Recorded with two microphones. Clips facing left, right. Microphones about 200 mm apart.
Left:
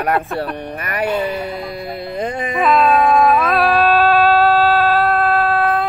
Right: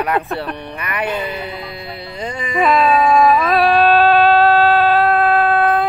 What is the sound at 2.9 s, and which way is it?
Howl, 60° left (ahead or behind).